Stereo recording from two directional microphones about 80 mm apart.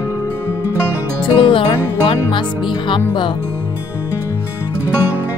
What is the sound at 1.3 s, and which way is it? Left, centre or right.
Music, left.